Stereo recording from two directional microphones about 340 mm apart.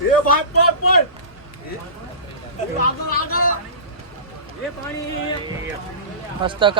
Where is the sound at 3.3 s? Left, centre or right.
Left.